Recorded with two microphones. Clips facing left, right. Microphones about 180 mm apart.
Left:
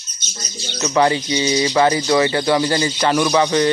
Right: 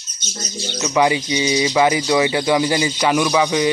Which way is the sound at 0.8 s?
10° right (ahead or behind).